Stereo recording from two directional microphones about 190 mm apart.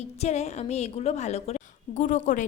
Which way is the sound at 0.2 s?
35° left (ahead or behind).